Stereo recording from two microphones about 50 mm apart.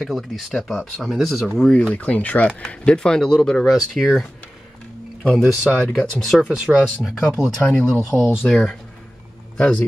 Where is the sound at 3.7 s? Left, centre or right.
Centre.